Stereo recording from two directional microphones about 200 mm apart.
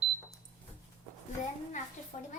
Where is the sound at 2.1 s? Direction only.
30° left (ahead or behind).